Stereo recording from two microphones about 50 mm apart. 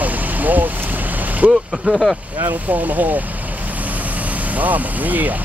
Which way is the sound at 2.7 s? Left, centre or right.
Right.